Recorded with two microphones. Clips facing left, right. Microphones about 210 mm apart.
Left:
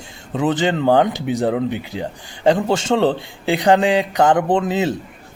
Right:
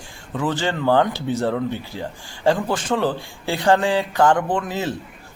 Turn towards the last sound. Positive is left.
turn(degrees=20)  # may be behind; listen again after turning